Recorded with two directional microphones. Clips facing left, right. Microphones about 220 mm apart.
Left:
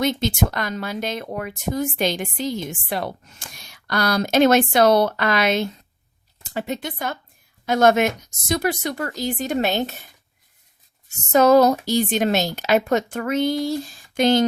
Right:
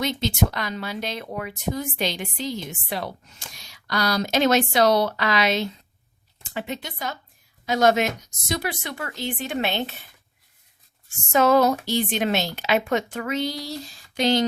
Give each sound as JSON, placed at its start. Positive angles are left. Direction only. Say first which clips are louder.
{"t": 0.0, "sound": "speech", "louder": "left 3 dB", "side_deg": 50}
{"t": 6.4, "sound": "speech", "louder": "left 4 dB", "side_deg": 40}
{"t": 11.3, "sound": "a sound", "louder": "left 4 dB", "side_deg": 40}
{"t": 11.9, "sound": "speech", "louder": "left 4 dB", "side_deg": 45}